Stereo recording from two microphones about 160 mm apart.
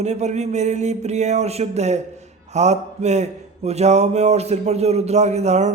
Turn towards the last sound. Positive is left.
turn(degrees=-45)  # may be behind; listen again after turning